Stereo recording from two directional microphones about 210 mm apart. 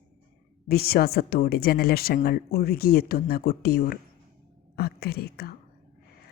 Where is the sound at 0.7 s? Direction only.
45° left (ahead or behind).